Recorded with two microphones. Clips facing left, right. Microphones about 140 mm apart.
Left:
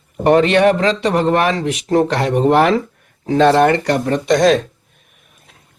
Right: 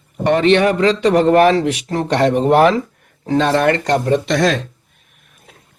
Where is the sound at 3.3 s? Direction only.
55° left (ahead or behind).